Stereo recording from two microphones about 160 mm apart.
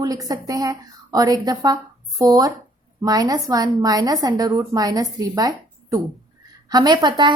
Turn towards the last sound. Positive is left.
turn(degrees=-25)  # may be behind; listen again after turning